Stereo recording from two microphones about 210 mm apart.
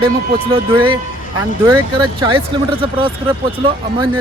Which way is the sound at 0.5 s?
25° right (ahead or behind).